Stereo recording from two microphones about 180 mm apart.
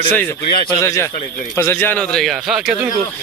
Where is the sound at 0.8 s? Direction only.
15° left (ahead or behind); by 2.7 s centre (ahead or behind).